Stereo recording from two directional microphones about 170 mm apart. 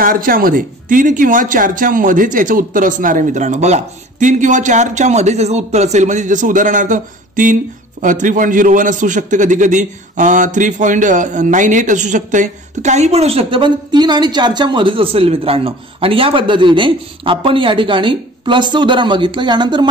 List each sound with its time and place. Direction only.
0.0 s a man's voice: 55° right (ahead or behind); by 19.9 s 25° right (ahead or behind)